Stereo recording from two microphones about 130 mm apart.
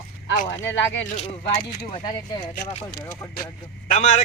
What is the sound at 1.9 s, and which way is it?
Speech, 40° left (ahead or behind).